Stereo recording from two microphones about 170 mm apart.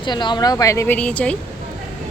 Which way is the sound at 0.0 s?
25° left (ahead or behind).